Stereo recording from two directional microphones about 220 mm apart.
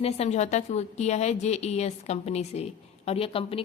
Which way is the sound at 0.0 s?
30° left (ahead or behind).